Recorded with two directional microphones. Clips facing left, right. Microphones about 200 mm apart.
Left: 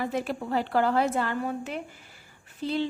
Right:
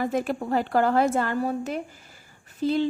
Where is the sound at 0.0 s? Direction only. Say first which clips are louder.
Right 4 dB; 50° right (ahead or behind).